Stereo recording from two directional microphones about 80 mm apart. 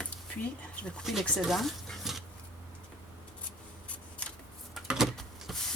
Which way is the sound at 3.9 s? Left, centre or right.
Centre.